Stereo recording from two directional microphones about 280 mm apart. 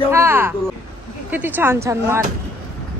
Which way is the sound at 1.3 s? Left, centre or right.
Centre.